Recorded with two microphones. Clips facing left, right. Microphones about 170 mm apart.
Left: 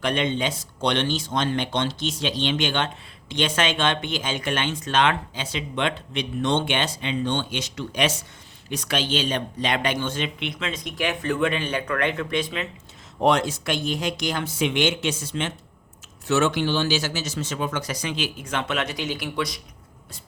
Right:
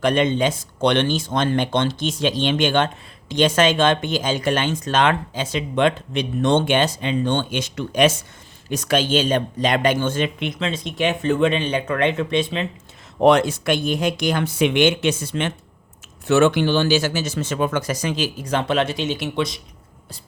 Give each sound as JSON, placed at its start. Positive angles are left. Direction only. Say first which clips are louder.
{"t": 0.0, "sound": "speech", "louder": "right 6 dB", "side_deg": -45}
{"t": 10.6, "sound": "speech", "louder": "right 6 dB", "side_deg": -25}
{"t": 13.1, "sound": "speech", "louder": "right 6 dB", "side_deg": -65}